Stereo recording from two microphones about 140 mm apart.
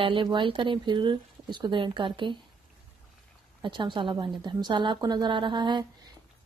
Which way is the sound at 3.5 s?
35° right (ahead or behind).